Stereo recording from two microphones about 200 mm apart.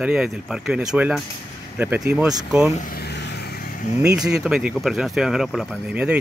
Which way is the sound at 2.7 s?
45° left (ahead or behind).